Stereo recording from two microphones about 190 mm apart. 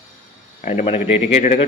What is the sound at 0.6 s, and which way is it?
Speech, 35° left (ahead or behind).